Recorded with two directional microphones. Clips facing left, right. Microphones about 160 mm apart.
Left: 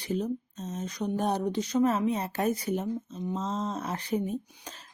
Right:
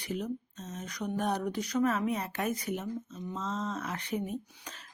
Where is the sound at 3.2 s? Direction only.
30° left (ahead or behind).